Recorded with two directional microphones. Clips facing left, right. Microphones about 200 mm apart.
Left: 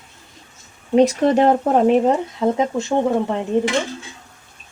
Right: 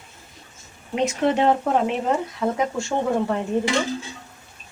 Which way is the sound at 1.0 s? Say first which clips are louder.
Left 6 dB; 40° left (ahead or behind).